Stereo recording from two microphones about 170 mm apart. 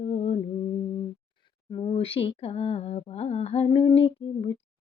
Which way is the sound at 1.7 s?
30° left (ahead or behind).